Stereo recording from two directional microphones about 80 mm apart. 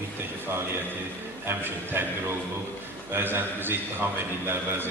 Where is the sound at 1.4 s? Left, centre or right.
Right.